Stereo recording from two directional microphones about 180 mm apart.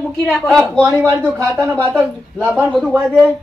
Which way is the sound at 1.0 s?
15° right (ahead or behind).